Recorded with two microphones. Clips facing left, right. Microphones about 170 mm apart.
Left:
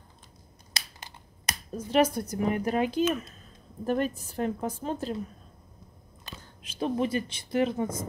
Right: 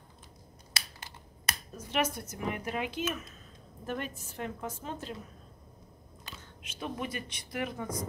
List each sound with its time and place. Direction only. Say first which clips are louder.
0.9 s finger snapping: left 1 dB; 20° left (ahead or behind)
1.9 s a woman's voice: left 8 dB; 35° left (ahead or behind)
6.3 s speech: left 3 dB; 35° left (ahead or behind)